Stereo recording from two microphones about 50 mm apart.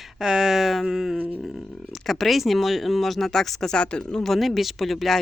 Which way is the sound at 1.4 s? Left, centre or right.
Centre.